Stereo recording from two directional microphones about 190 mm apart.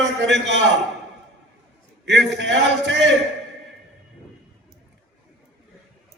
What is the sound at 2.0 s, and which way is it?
A man's voice, 65° right (ahead or behind).